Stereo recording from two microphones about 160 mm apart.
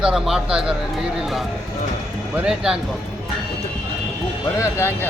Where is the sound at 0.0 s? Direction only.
5° right (ahead or behind).